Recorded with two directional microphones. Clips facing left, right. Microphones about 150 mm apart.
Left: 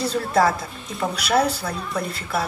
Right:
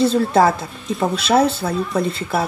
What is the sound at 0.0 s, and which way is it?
Speech, 25° right (ahead or behind).